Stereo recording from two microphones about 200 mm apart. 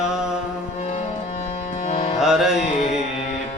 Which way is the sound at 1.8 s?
30° left (ahead or behind).